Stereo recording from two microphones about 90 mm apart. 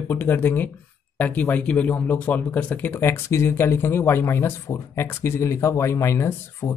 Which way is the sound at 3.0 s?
30° left (ahead or behind).